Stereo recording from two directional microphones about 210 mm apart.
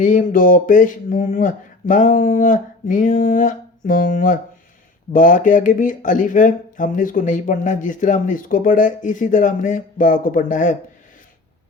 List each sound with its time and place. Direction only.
0.0 s speech: 40° left (ahead or behind)